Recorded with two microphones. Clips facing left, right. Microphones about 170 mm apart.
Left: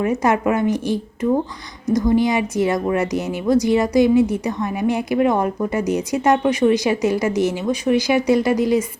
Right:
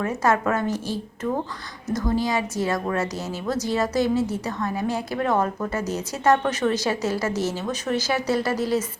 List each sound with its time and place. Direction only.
0.0 s speech: 15° left (ahead or behind)